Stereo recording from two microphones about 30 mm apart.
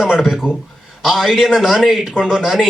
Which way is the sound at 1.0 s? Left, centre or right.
Centre.